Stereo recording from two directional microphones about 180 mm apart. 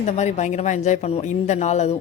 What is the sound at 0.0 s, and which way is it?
A woman's voice, 40° left (ahead or behind).